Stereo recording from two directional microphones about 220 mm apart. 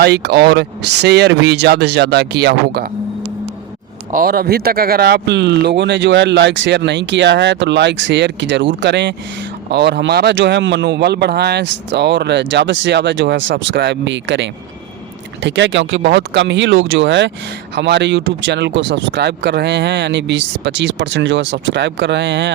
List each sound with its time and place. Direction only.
0.0 s speech: 50° right (ahead or behind)
4.1 s speech: 40° right (ahead or behind)